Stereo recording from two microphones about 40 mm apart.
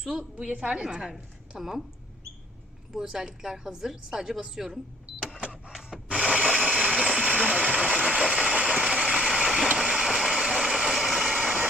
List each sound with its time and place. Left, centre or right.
0.0 s a woman's voice: centre
0.3 s a woman's voice: right; by 1.8 s centre
2.9 s a woman's voice: centre
5.6 s printer: centre
6.1 s mechanisms: centre
7.0 s a sound: right
7.5 s vehicle: right